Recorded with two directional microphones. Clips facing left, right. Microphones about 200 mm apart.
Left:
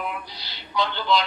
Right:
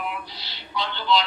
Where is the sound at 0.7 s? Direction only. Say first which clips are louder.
Left 1 dB; 45° left (ahead or behind).